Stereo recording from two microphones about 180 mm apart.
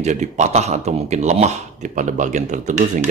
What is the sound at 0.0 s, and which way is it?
Speech, 40° right (ahead or behind).